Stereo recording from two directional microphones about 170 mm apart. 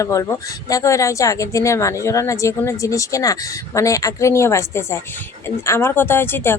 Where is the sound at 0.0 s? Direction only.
20° left (ahead or behind).